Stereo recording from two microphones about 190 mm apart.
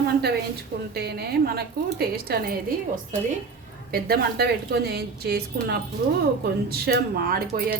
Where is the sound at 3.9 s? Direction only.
55° right (ahead or behind).